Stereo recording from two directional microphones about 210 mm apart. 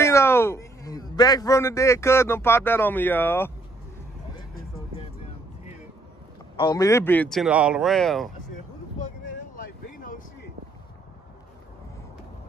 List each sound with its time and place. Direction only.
0.0 s a man's voice: 10° left (ahead or behind)
4.9 s vehicle: 30° left (ahead or behind)
6.5 s speech: 20° left (ahead or behind); by 8.3 s centre (ahead or behind)
9.8 s a sound: 40° left (ahead or behind)